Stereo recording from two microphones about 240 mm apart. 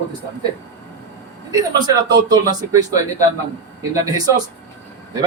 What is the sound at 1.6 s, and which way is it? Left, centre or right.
Speech, centre.